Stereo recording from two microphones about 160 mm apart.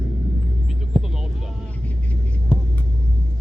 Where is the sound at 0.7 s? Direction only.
Centre (ahead or behind).